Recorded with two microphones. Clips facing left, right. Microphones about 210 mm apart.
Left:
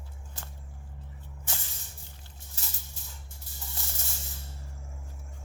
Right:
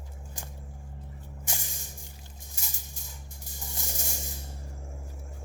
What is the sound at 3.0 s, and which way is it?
Music, 15° right (ahead or behind).